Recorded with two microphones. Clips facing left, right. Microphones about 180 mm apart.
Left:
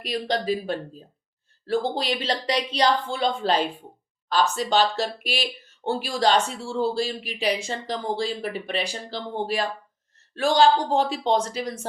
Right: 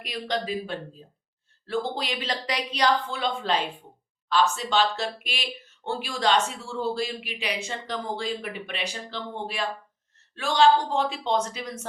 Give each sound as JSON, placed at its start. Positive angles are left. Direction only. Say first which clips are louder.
{"t": 0.0, "sound": "speech", "louder": "left 4 dB", "side_deg": 35}